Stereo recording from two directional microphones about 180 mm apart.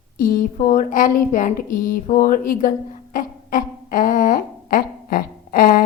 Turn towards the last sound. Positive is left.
turn(degrees=55)  # may be behind; listen again after turning